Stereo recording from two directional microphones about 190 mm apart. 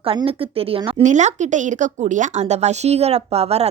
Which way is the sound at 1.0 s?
40° right (ahead or behind).